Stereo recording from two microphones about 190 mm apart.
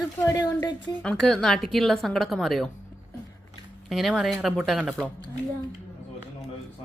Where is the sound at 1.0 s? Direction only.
5° left (ahead or behind).